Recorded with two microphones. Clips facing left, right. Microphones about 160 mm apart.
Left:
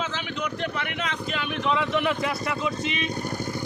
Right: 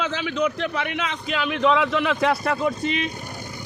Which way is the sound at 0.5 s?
90° right.